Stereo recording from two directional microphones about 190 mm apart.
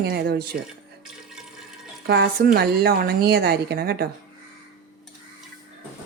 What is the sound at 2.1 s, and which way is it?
Speech, 55° right (ahead or behind).